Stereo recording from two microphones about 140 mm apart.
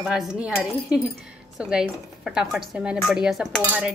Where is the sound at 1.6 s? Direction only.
5° right (ahead or behind).